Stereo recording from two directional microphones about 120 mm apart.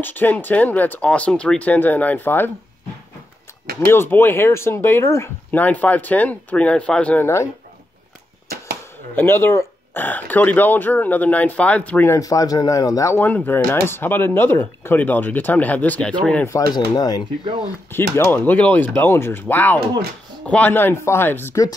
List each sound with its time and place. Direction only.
0.0 s speech: 15° left (ahead or behind)
3.9 s speech: 20° left (ahead or behind)
9.1 s speech: 20° left (ahead or behind)
12.1 s speech: 30° left (ahead or behind)
13.2 s speech: 15° left (ahead or behind)
16.4 s speech: 30° left (ahead or behind)
17.9 s speech: 20° left (ahead or behind)